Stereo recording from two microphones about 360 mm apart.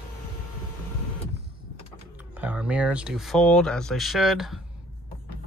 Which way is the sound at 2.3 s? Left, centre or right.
Centre.